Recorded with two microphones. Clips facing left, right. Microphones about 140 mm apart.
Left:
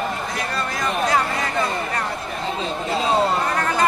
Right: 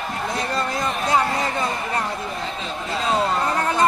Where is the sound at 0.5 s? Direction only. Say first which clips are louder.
Left 2 dB; 25° right (ahead or behind).